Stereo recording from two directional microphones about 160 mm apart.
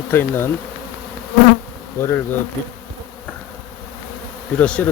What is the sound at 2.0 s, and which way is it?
Speech, 15° left (ahead or behind).